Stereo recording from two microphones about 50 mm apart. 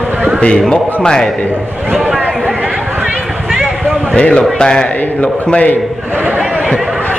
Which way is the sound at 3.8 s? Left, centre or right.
Centre.